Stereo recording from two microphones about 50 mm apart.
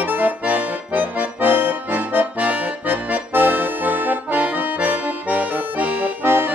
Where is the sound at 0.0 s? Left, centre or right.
Right.